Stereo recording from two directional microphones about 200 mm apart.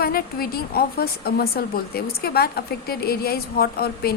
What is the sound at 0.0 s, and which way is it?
A woman's voice, 50° left (ahead or behind).